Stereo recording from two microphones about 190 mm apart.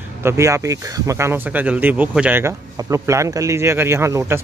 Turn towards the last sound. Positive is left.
turn(degrees=-15)  # may be behind; listen again after turning